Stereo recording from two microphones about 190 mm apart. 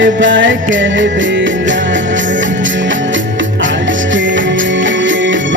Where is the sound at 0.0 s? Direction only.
80° right.